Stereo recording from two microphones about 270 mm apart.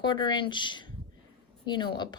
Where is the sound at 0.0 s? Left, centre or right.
Centre.